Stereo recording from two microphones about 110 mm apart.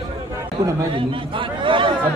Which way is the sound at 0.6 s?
25° right (ahead or behind).